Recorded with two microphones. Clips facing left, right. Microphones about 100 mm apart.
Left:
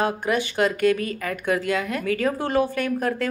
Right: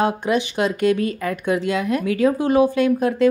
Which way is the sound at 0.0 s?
20° right (ahead or behind).